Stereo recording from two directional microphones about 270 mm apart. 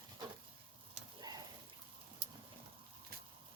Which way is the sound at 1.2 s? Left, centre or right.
Centre.